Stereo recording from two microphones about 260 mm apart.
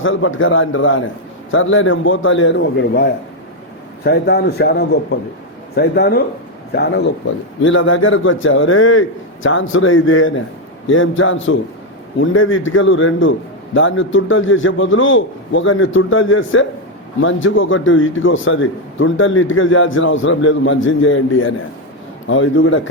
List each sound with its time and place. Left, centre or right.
0.0 s a man's voice: left
7.6 s a man's voice: left